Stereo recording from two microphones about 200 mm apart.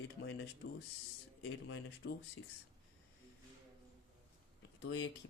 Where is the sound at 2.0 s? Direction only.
55° left (ahead or behind).